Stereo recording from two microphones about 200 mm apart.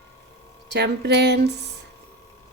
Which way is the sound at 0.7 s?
55° right (ahead or behind).